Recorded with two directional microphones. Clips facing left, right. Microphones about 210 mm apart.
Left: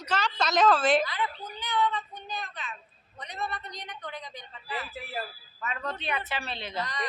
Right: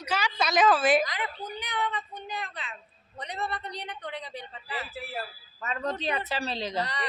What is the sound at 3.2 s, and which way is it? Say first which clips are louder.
Speech: right 2 dB; 30° right (ahead or behind).